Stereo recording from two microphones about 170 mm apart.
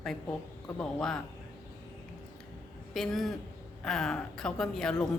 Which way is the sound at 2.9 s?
Centre (ahead or behind).